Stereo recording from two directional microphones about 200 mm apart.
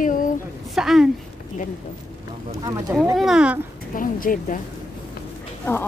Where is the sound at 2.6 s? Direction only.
15° right (ahead or behind).